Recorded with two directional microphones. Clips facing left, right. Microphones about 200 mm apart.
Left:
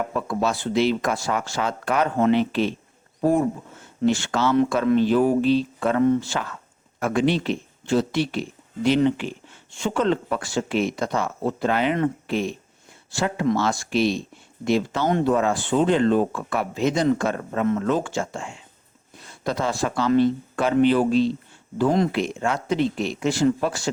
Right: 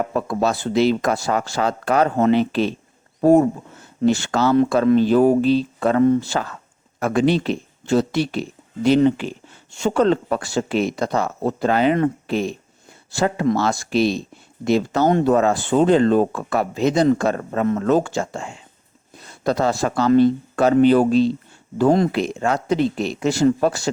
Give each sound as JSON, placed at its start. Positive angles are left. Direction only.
{"t": 0.1, "sound": "speech", "side_deg": -40}